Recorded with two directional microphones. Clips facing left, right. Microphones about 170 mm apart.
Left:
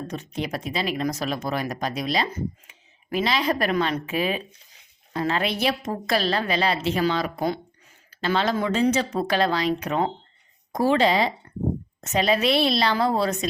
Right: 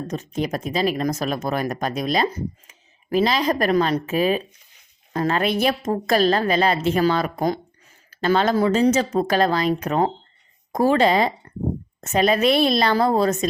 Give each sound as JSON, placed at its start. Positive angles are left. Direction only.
{"t": 0.1, "sound": "speech", "side_deg": -45}